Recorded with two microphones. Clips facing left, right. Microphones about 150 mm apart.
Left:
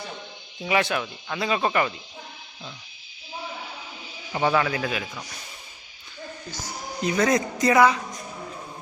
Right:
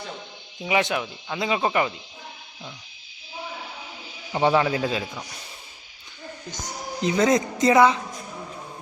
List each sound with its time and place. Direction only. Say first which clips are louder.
0.6 s speech: even; 20° right (ahead or behind)
4.3 s speech: right 2 dB; 25° right (ahead or behind)
6.5 s speech: right 4 dB; 20° right (ahead or behind)